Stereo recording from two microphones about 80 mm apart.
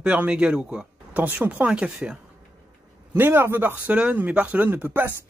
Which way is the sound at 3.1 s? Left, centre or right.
Right.